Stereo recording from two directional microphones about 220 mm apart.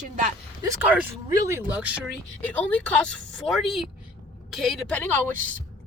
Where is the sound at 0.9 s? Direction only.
10° right (ahead or behind).